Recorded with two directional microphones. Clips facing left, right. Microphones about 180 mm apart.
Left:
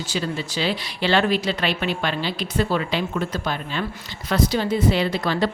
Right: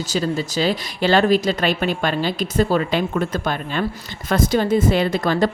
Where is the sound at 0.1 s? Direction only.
40° right (ahead or behind).